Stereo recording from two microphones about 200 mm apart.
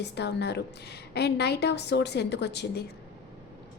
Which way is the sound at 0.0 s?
60° left (ahead or behind).